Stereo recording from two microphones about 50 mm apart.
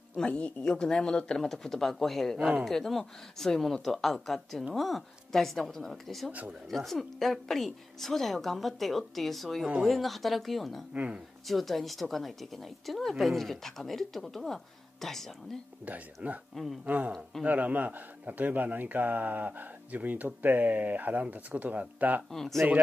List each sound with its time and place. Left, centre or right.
0.3 s speech: left
0.7 s speech: centre
2.3 s speech: centre
2.6 s a woman's voice: centre
10.9 s speech: right
11.4 s a woman's voice: centre
15.8 s a man's voice: right
22.3 s a woman's voice: centre